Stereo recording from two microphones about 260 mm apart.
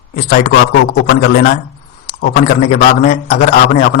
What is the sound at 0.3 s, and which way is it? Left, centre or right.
A man's voice, left.